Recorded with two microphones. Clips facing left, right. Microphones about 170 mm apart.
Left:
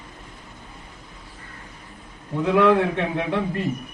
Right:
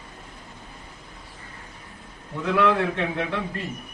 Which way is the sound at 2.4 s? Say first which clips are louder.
Left 4 dB; 15° left (ahead or behind).